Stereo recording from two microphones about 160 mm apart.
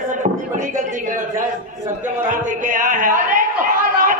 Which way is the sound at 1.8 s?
50° right (ahead or behind).